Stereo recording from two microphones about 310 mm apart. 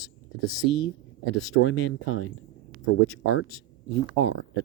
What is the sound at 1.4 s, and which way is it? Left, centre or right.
Speech, left.